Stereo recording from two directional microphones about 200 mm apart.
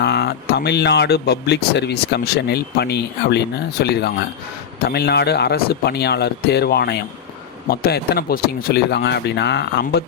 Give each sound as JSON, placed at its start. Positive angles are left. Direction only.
{"t": 0.0, "sound": "speech", "side_deg": 55}